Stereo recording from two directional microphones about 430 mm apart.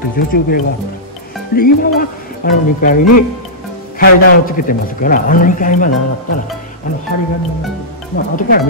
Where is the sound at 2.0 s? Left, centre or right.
Centre.